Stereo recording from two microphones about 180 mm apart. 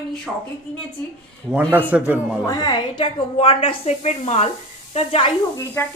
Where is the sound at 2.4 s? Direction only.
20° left (ahead or behind).